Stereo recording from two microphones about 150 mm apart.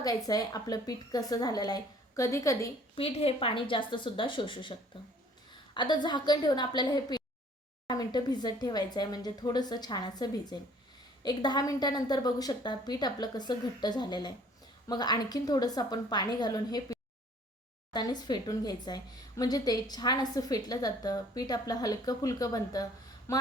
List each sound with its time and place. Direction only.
0.3 s a woman's voice: 25° left (ahead or behind)
2.9 s a woman's voice: 40° left (ahead or behind); by 23.4 s 20° left (ahead or behind)